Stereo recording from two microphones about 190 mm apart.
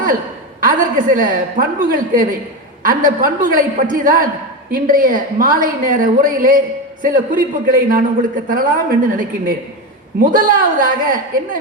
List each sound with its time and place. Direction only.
0.6 s a woman's voice: 45° right (ahead or behind)